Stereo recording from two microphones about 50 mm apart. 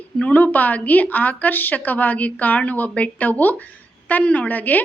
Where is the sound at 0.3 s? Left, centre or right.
Left.